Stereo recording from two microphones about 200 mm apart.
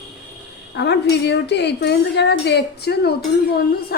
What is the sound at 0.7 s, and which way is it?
Speech, 60° left (ahead or behind).